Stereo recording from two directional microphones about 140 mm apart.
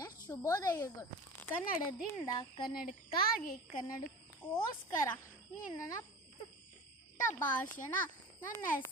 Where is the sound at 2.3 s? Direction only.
35° left (ahead or behind).